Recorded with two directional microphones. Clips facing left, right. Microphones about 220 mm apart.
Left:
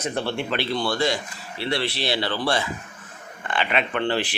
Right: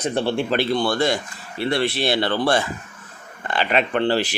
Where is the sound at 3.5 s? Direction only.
40° right (ahead or behind).